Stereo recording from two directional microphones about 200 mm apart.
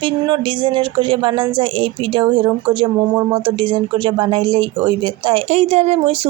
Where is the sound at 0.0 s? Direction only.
25° right (ahead or behind).